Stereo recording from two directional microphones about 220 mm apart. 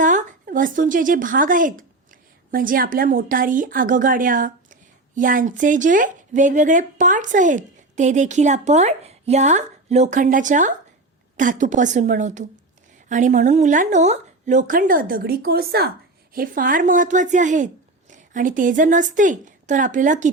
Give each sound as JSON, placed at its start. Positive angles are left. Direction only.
{"t": 0.0, "sound": "a woman's voice", "side_deg": -35}